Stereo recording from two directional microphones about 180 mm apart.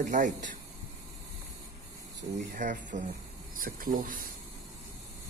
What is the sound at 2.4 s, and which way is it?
Speech, 45° right (ahead or behind).